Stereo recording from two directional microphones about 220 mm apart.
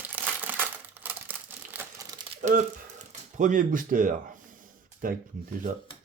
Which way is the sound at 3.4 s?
35° right (ahead or behind).